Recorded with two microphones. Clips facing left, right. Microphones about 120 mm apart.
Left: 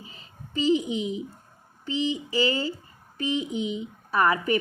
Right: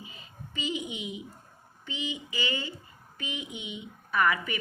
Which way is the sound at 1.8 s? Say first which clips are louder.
Left 9 dB; 35° left (ahead or behind).